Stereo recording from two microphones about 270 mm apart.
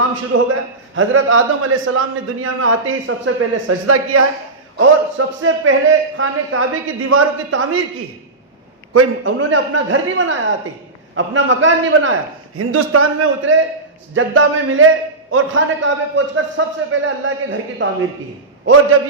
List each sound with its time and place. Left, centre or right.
0.3 s a man's voice: right
8.9 s a man's voice: right